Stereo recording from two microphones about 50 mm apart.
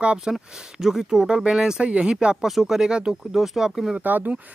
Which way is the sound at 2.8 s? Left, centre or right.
Centre.